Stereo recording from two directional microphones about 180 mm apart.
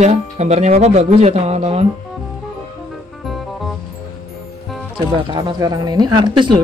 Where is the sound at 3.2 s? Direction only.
Centre (ahead or behind).